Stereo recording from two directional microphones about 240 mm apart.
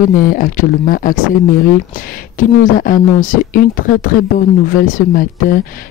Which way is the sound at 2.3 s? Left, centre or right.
Left.